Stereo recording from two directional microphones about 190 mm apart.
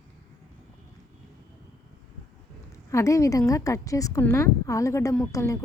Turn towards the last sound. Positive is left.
turn(degrees=15)  # may be behind; listen again after turning